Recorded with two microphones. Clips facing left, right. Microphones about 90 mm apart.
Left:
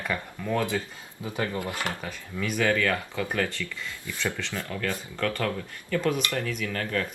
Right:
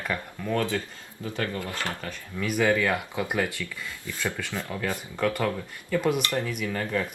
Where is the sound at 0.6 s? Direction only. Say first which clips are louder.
Even; 15° left (ahead or behind).